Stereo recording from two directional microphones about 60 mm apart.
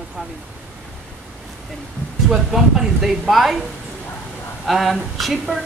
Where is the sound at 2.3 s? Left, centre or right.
Centre.